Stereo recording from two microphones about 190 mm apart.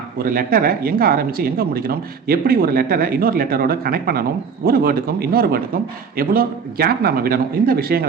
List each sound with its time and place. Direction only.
0.2 s speech: 50° right (ahead or behind)